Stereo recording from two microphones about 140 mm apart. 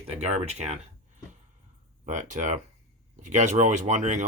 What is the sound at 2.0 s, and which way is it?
Speech, 60° right (ahead or behind).